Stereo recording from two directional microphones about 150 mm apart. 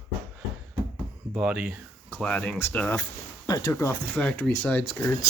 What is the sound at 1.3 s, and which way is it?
Speech, 5° right (ahead or behind).